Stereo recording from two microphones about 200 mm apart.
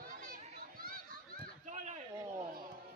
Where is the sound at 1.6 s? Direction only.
35° right (ahead or behind).